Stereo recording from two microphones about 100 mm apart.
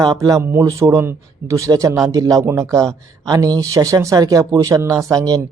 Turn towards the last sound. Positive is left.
turn(degrees=-35)  # may be behind; listen again after turning